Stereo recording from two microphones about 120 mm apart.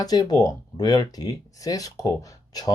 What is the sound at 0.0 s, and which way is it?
Speech, 35° left (ahead or behind).